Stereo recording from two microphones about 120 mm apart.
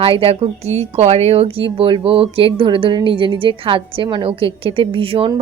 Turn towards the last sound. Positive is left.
turn(degrees=-50)  # may be behind; listen again after turning